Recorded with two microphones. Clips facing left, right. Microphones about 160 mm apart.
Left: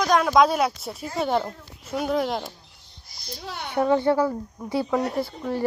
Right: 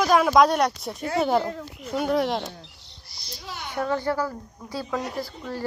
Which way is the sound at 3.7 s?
20° left (ahead or behind).